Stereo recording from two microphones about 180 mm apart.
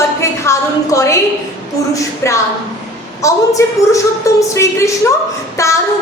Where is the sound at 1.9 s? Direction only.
15° left (ahead or behind).